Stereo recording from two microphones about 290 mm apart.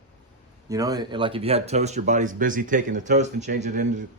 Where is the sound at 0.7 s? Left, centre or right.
Centre.